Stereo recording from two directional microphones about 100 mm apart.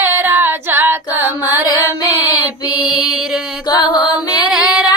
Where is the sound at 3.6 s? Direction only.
40° left (ahead or behind).